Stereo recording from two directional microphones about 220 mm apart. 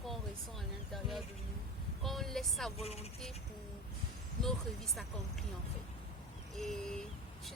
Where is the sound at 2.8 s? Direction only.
25° left (ahead or behind).